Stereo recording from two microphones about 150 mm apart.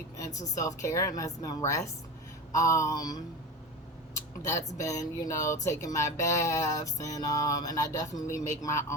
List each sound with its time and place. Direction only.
0.2 s speech: 20° left (ahead or behind)